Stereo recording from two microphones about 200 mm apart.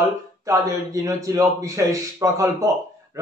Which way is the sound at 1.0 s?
15° right (ahead or behind).